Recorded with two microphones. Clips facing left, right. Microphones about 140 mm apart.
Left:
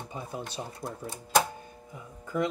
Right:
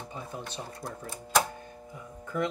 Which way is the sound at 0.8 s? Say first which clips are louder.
Left 2 dB; 25° left (ahead or behind).